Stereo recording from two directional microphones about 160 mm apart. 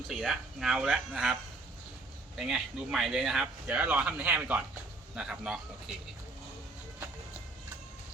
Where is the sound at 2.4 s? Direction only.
5° right (ahead or behind).